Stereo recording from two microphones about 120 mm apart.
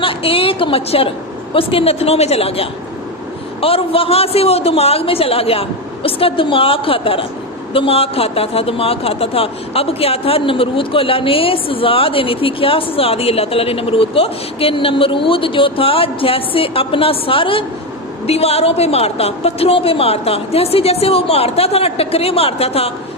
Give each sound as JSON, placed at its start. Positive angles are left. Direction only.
{"t": 0.0, "sound": "a woman's voice", "side_deg": 50}